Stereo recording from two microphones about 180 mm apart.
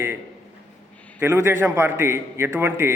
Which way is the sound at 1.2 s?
15° right (ahead or behind).